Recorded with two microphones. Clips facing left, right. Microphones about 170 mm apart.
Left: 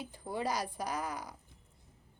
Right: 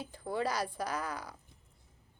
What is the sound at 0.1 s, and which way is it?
A woman's voice, 15° left (ahead or behind).